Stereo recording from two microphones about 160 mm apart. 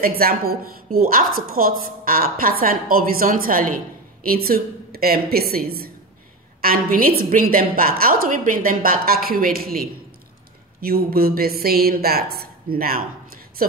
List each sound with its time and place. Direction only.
0.0 s a woman's voice: 65° right (ahead or behind)